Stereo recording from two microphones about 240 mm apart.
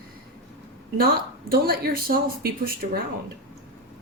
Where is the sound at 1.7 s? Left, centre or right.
Right.